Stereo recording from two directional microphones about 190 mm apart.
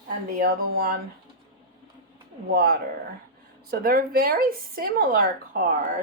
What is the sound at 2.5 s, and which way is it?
A woman's voice, 55° right (ahead or behind).